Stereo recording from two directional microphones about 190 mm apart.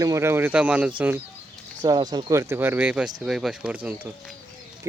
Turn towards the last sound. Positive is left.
turn(degrees=-10)  # may be behind; listen again after turning